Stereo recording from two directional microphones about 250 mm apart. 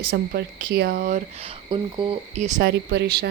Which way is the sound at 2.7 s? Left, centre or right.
Right.